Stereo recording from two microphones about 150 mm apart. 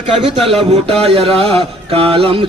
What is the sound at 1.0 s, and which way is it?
A man's voice, 40° right (ahead or behind).